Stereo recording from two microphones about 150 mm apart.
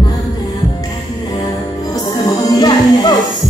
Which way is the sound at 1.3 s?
25° left (ahead or behind).